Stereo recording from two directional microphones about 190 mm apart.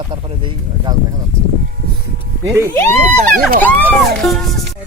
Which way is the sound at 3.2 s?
45° right (ahead or behind).